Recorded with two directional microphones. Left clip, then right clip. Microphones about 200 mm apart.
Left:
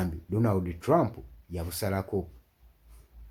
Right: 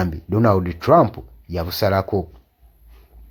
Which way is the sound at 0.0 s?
25° right (ahead or behind).